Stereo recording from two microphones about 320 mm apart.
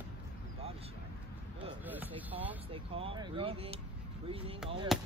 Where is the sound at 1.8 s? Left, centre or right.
Centre.